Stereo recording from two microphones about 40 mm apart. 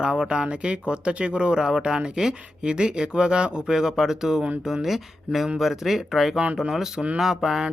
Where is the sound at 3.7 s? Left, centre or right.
Centre.